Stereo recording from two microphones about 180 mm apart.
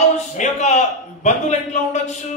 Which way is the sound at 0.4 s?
40° left (ahead or behind).